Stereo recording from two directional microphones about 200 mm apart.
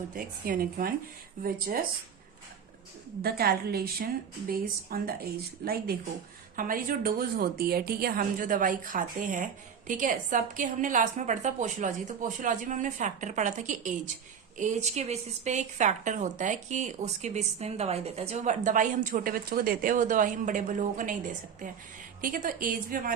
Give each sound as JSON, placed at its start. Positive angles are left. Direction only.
{"t": 0.1, "sound": "a woman's voice", "side_deg": -45}
{"t": 3.2, "sound": "a woman's voice", "side_deg": -50}
{"t": 22.2, "sound": "a woman's voice", "side_deg": -40}